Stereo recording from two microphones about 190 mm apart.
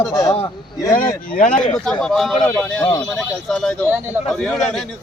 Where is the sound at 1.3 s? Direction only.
45° left (ahead or behind).